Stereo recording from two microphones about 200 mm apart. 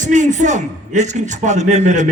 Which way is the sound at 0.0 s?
40° right (ahead or behind).